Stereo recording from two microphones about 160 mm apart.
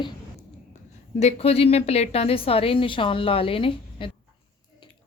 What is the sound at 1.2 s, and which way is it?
A woman's voice, 40° left (ahead or behind).